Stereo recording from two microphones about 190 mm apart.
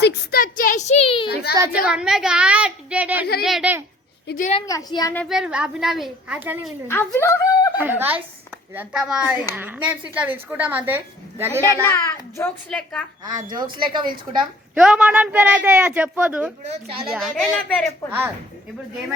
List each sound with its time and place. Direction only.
0.0 s a child's voice: 50° left (ahead or behind); by 1.3 s 25° left (ahead or behind)
1.3 s a child's voice: 55° left (ahead or behind)
1.9 s a woman's voice: 5° right (ahead or behind)
4.3 s a woman's voice: 45° left (ahead or behind)
4.6 s a woman's voice: 20° left (ahead or behind)
5.3 s a woman's voice: 5° right (ahead or behind)
6.8 s a child's voice: 10° left (ahead or behind)
7.8 s a woman's voice: 10° right (ahead or behind)
11.6 s a child's voice: 15° left (ahead or behind)
13.2 s speech: 25° right (ahead or behind)
14.8 s a woman's voice: 5° right (ahead or behind)
16.6 s speech: 30° right (ahead or behind)
17.1 s a woman's voice: centre (ahead or behind)